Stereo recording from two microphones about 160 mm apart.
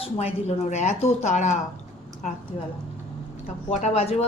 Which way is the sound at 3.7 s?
40° left (ahead or behind).